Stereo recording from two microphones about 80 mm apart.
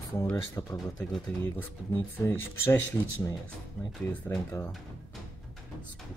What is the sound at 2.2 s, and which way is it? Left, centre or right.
Speech, left.